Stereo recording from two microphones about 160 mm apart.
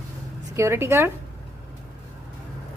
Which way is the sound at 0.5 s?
15° right (ahead or behind).